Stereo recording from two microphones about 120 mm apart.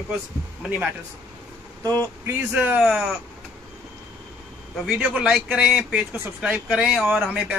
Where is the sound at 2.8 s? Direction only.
5° right (ahead or behind).